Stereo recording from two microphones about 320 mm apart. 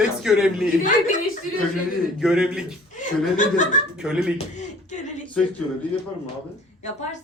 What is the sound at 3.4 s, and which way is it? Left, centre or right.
Speech, left.